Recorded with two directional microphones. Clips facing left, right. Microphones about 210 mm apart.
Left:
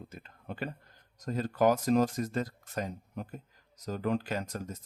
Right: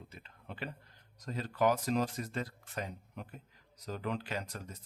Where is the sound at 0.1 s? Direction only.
45° left (ahead or behind).